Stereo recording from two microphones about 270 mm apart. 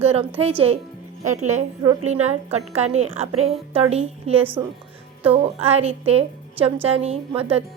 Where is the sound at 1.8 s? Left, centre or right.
Centre.